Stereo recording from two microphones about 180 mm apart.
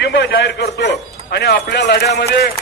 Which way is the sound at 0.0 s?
70° left (ahead or behind).